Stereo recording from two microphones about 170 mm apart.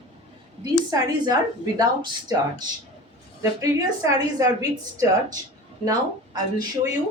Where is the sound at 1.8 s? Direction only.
25° right (ahead or behind).